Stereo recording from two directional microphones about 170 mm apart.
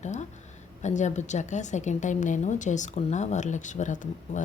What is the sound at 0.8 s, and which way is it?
A woman's voice, 45° left (ahead or behind).